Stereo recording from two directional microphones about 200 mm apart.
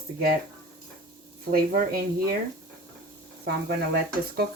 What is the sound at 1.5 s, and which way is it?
Speech, 45° right (ahead or behind).